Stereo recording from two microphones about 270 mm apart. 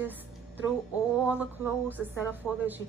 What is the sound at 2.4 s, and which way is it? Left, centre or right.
Speech, centre.